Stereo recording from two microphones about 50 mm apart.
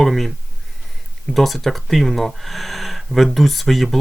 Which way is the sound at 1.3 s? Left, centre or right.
Centre.